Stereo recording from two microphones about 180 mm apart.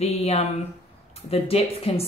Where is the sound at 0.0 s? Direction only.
35° left (ahead or behind).